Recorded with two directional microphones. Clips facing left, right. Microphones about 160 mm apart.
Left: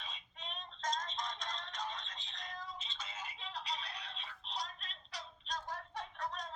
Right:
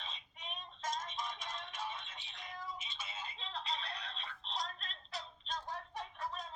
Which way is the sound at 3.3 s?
30° right (ahead or behind).